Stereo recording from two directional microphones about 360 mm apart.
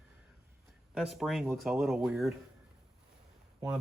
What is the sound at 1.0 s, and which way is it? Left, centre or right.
Speech, centre.